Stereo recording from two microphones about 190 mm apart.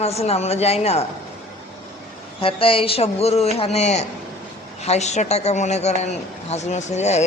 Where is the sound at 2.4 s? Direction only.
30° left (ahead or behind).